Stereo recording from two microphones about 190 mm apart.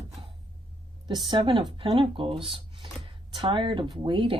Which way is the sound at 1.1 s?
25° right (ahead or behind).